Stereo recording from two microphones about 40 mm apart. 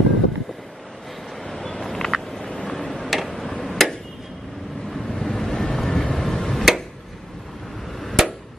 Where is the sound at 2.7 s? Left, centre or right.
Centre.